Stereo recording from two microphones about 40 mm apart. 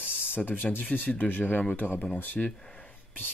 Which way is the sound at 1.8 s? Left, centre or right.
Left.